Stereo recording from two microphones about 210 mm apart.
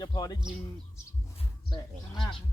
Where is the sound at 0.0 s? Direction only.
20° left (ahead or behind).